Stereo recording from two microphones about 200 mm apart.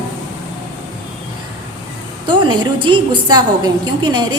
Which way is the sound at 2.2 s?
25° right (ahead or behind).